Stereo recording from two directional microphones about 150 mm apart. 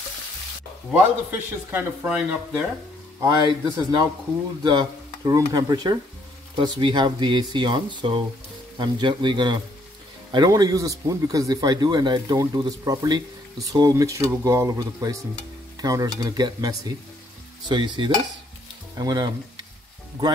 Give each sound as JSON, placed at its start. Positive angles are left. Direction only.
{"t": 1.7, "sound": "speech", "side_deg": -10}
{"t": 3.2, "sound": "a man's voice", "side_deg": -25}